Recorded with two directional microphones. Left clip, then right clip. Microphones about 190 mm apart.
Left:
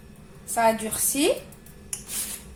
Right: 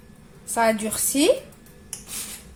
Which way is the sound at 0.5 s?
45° right (ahead or behind).